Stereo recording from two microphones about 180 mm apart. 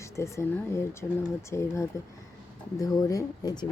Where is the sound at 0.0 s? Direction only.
15° left (ahead or behind).